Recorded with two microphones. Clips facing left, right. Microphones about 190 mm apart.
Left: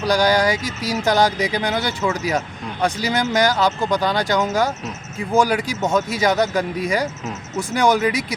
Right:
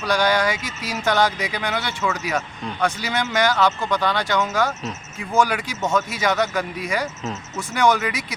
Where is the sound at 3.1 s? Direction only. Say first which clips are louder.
Left 3 dB; 35° left (ahead or behind).